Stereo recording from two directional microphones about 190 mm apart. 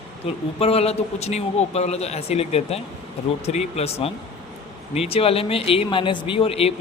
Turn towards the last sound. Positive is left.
turn(degrees=30)  # may be behind; listen again after turning